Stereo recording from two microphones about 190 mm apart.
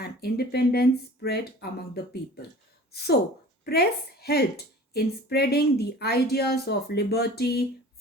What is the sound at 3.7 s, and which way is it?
A woman's voice, 55° left (ahead or behind).